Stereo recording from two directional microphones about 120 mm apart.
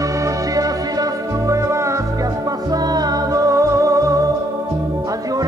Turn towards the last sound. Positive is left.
turn(degrees=-30)  # may be behind; listen again after turning